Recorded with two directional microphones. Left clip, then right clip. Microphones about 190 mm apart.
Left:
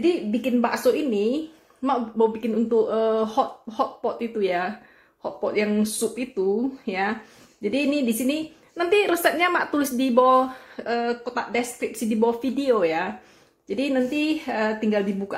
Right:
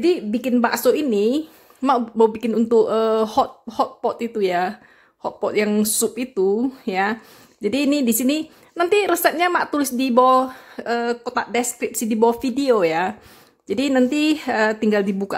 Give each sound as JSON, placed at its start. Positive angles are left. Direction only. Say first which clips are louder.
{"t": 0.0, "sound": "a woman's voice", "louder": "right 3 dB", "side_deg": -50}